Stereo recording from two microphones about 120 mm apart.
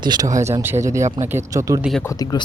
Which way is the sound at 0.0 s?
35° right (ahead or behind).